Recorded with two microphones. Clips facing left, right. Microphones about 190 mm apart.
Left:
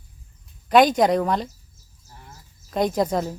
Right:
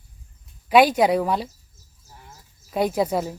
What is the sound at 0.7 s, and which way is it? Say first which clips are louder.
Speech: even; 5° right (ahead or behind).